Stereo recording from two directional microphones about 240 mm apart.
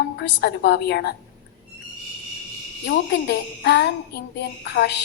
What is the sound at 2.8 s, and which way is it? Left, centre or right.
A woman's voice, left.